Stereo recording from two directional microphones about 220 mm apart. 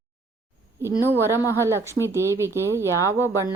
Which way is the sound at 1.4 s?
15° left (ahead or behind).